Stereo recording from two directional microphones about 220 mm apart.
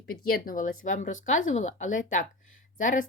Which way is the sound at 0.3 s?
40° left (ahead or behind).